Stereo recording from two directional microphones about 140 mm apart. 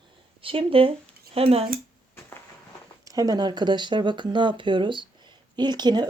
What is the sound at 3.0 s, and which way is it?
Speech, 25° right (ahead or behind).